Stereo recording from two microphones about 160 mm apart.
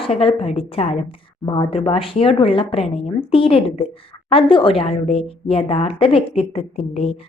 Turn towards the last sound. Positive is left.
turn(degrees=40)  # may be behind; listen again after turning